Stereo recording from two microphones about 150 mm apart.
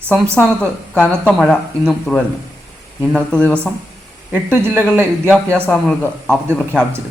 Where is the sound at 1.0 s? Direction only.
5° left (ahead or behind).